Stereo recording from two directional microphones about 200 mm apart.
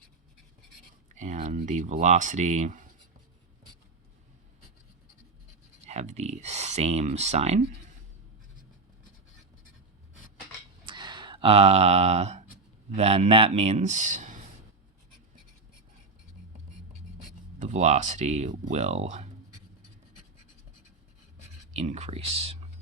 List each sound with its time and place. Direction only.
1.1 s speech: 35° right (ahead or behind)
5.8 s speech: 35° right (ahead or behind)
10.8 s a sound: 20° right (ahead or behind)
13.0 s speech: 30° right (ahead or behind)
17.6 s speech: 35° right (ahead or behind)
21.7 s speech: 35° right (ahead or behind)